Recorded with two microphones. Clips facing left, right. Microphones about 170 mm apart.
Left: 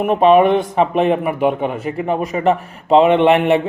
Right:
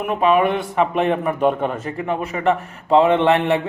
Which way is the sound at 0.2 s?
25° left (ahead or behind).